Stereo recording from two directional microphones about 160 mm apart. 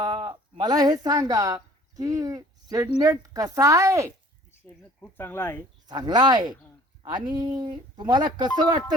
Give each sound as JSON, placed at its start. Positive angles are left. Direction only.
{"t": 0.0, "sound": "a sound", "side_deg": -25}
{"t": 0.5, "sound": "speech", "side_deg": -25}
{"t": 4.9, "sound": "speech", "side_deg": 15}
{"t": 5.9, "sound": "speech", "side_deg": -25}